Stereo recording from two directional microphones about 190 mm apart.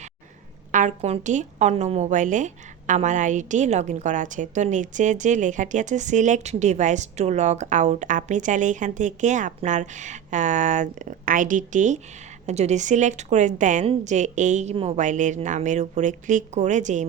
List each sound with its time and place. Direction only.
0.7 s a woman's voice: 40° right (ahead or behind)